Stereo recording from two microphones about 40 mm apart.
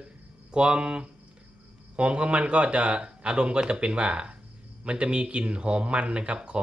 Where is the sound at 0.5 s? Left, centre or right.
Right.